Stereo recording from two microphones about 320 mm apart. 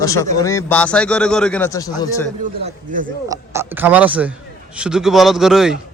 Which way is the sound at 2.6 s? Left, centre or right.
Right.